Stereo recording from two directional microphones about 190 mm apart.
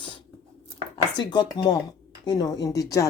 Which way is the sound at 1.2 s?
20° left (ahead or behind).